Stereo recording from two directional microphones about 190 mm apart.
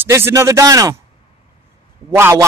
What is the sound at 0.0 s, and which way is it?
Speech, 15° right (ahead or behind).